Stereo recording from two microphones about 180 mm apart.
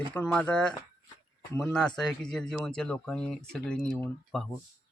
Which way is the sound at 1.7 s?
5° left (ahead or behind).